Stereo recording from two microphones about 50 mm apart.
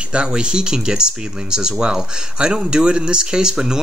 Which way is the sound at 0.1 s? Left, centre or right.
Centre.